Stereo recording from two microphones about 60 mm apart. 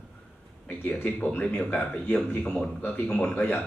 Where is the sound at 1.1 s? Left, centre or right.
Left.